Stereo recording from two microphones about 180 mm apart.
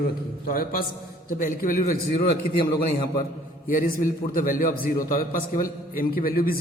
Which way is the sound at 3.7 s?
50° left (ahead or behind).